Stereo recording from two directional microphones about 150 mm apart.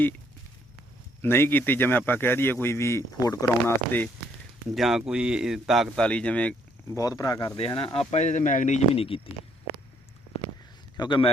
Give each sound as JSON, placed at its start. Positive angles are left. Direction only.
{"t": 1.2, "sound": "a man's voice", "side_deg": 15}
{"t": 4.7, "sound": "speech", "side_deg": 0}
{"t": 7.0, "sound": "speech", "side_deg": 25}
{"t": 7.6, "sound": "speech", "side_deg": 40}
{"t": 7.9, "sound": "speech", "side_deg": 50}
{"t": 10.9, "sound": "speech", "side_deg": 30}